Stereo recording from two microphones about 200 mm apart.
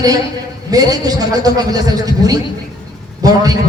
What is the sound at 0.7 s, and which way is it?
A man's voice, 20° right (ahead or behind).